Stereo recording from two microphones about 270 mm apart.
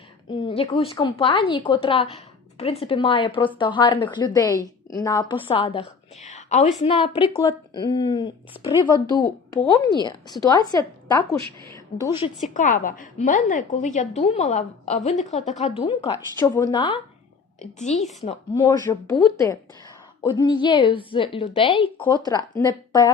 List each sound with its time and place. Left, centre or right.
0.3 s a woman's voice: centre
12.5 s a woman's voice: left
18.5 s a woman's voice: centre